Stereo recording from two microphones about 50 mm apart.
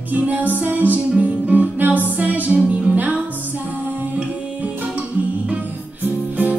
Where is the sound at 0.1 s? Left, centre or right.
Right.